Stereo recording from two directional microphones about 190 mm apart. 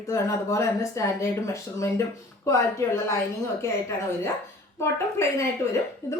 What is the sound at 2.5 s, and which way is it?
A woman's voice, 15° left (ahead or behind).